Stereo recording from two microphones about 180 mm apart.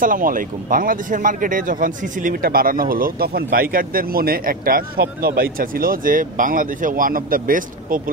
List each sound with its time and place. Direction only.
0.0 s speech: 50° right (ahead or behind)